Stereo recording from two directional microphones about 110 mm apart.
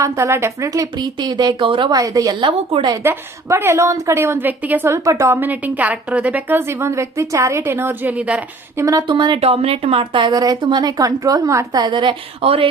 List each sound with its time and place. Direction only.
0.0 s speech: 25° right (ahead or behind); by 1.9 s 50° right (ahead or behind)
1.9 s speech: 30° right (ahead or behind); by 2.9 s 50° right (ahead or behind)
3.0 s a woman's voice: 20° right (ahead or behind)
5.0 s a woman's voice: 30° right (ahead or behind); by 8.4 s 15° right (ahead or behind)
8.7 s speech: 30° right (ahead or behind)
9.1 s speech: 45° right (ahead or behind)
9.4 s speech: 65° right (ahead or behind)